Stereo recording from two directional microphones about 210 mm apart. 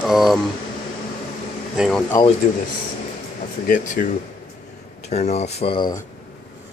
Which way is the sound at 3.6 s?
40° left (ahead or behind).